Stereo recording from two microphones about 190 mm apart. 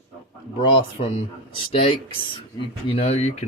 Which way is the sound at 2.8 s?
30° left (ahead or behind).